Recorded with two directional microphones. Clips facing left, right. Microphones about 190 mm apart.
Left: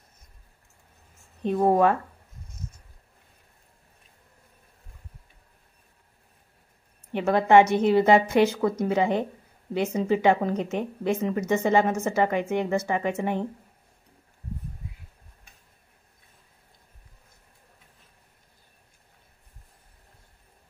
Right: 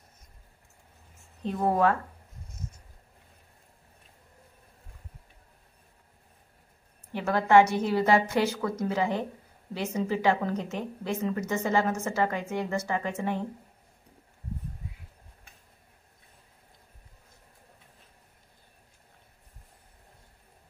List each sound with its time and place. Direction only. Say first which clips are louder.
1.6 s speech: left 4 dB; 20° left (ahead or behind)
7.1 s speech: left 4 dB; 20° left (ahead or behind)